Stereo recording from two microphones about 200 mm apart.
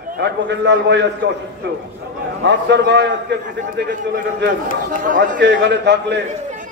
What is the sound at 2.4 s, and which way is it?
Speech, 60° right (ahead or behind).